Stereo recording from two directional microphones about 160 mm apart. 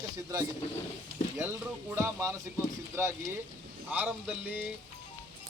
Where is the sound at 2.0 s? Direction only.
15° right (ahead or behind).